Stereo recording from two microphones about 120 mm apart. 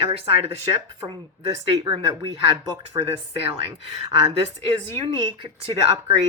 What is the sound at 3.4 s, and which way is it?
Speech, 55° right (ahead or behind).